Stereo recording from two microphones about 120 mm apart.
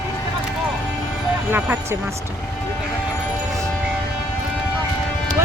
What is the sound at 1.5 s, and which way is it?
Speech, 15° right (ahead or behind).